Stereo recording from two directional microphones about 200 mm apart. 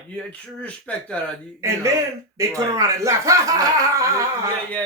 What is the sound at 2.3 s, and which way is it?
Speech, 15° right (ahead or behind).